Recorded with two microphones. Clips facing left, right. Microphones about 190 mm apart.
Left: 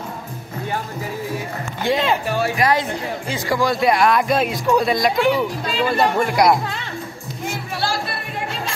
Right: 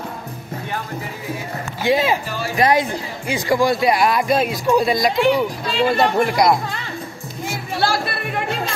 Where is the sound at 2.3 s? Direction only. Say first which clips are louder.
Left 5 dB; 60° left (ahead or behind).